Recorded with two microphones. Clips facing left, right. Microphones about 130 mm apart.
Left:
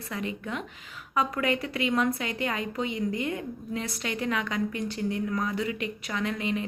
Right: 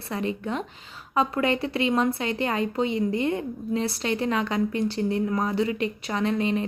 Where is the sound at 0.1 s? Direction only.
30° right (ahead or behind).